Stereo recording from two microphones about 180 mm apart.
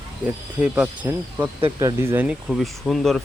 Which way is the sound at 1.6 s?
20° right (ahead or behind).